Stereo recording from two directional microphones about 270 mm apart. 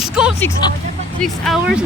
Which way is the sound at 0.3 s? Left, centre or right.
Centre.